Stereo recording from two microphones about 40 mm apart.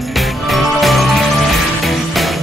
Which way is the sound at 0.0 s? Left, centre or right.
Centre.